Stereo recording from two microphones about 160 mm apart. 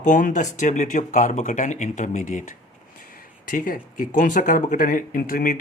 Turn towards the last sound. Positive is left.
turn(degrees=60)  # may be behind; listen again after turning